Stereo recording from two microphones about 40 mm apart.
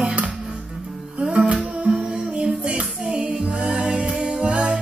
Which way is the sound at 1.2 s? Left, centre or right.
Right.